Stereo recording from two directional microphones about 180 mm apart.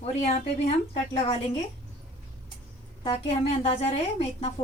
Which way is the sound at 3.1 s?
35° left (ahead or behind).